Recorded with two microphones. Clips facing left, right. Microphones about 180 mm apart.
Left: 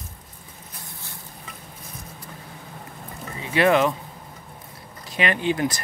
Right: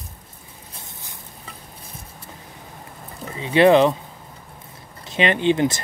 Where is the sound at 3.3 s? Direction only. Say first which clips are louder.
Right 5 dB; 25° right (ahead or behind).